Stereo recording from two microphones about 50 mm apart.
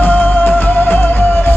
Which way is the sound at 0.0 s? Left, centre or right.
Left.